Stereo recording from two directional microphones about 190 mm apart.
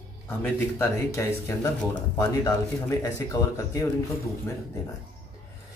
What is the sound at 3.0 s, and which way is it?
Speech, 15° left (ahead or behind).